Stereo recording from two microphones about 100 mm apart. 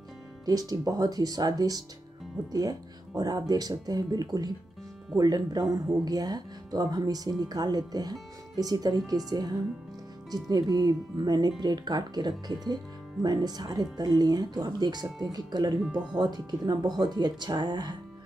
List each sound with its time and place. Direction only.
0.5 s speech: 40° right (ahead or behind)